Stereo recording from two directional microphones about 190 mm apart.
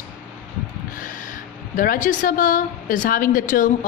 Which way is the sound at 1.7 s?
45° left (ahead or behind).